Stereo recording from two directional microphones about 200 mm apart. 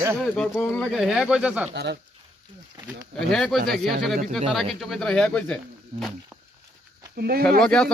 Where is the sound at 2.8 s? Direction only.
25° right (ahead or behind).